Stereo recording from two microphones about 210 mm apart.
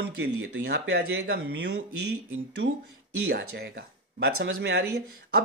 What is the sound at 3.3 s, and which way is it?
Speech, 50° right (ahead or behind).